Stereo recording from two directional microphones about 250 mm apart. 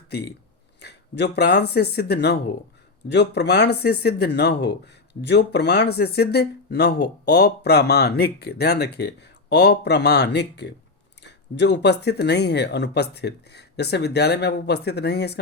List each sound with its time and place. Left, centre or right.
0.8 s speech: left